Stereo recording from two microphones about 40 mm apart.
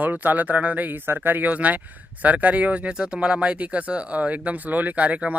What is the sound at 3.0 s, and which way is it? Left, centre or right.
Speech, right.